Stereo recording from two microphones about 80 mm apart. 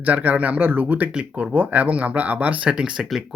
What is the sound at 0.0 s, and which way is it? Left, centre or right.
Speech, centre.